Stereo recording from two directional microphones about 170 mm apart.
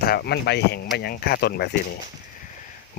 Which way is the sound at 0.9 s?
65° left (ahead or behind).